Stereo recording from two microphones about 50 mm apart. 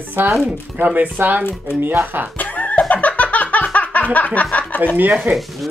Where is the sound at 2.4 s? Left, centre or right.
Left.